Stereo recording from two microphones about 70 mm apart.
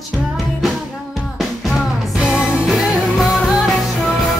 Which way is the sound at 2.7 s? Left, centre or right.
Centre.